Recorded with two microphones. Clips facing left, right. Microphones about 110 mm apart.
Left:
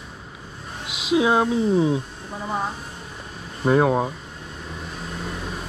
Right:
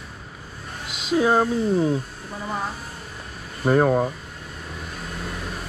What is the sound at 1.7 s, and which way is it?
Speech, centre (ahead or behind).